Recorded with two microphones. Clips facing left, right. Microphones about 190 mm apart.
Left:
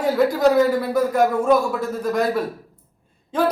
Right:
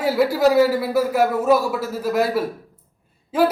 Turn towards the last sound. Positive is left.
turn(degrees=-5)  # may be behind; listen again after turning